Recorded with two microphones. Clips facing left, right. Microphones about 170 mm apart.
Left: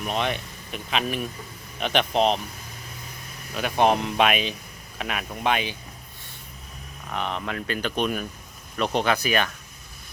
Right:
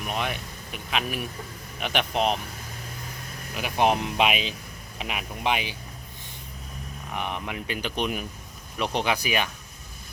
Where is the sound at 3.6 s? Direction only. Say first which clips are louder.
Left 2 dB; 10° right (ahead or behind).